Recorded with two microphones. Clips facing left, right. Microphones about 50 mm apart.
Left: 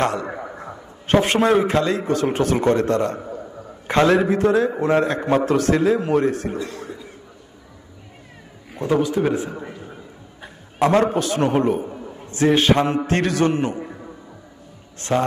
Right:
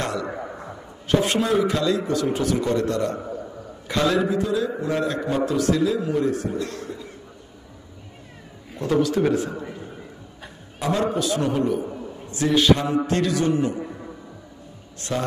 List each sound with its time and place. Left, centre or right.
0.0 s a man's voice: left
0.3 s a sound: centre
1.0 s a man's voice: left
3.2 s a sound: centre
3.8 s a man's voice: left
6.6 s cough: centre
8.7 s a man's voice: centre
10.8 s a man's voice: left
11.8 s a sound: centre
12.3 s a man's voice: left
13.7 s music: centre
15.0 s a man's voice: left